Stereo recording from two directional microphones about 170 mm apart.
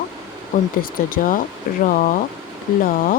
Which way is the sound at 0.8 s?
55° left (ahead or behind).